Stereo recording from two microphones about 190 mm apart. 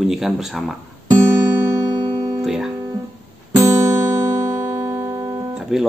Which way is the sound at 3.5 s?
15° right (ahead or behind).